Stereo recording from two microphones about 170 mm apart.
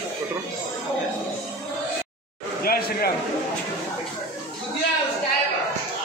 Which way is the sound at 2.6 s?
65° left (ahead or behind).